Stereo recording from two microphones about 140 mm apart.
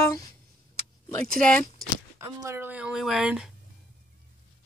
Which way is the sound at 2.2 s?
25° right (ahead or behind).